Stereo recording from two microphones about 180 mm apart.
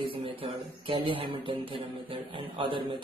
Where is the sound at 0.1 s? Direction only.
30° right (ahead or behind).